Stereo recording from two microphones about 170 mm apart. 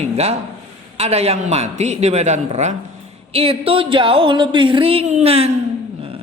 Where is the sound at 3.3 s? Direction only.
35° right (ahead or behind).